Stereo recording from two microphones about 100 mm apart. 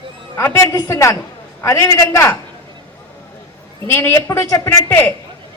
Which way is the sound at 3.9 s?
25° left (ahead or behind).